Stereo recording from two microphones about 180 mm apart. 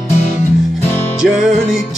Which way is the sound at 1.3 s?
Centre (ahead or behind).